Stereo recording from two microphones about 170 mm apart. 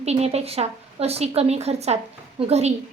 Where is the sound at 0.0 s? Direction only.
40° right (ahead or behind).